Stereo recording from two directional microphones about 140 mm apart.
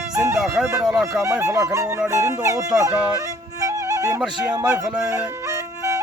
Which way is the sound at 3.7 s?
20° right (ahead or behind).